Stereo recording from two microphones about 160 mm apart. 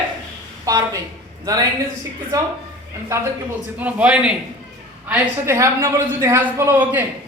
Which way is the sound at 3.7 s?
10° right (ahead or behind).